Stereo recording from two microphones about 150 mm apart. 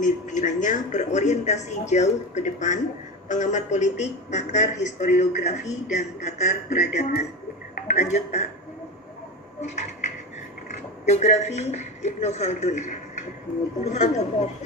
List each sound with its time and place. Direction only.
0.0 s a woman's voice: 55° left (ahead or behind)
11.1 s a woman's voice: 50° left (ahead or behind)